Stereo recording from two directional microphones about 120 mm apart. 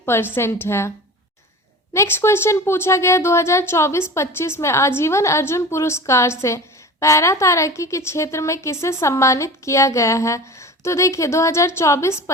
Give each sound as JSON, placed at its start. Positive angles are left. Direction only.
{"t": 0.0, "sound": "a woman's voice", "side_deg": 20}